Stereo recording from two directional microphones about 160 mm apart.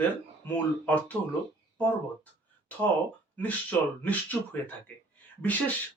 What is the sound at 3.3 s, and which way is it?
Speech, 10° left (ahead or behind).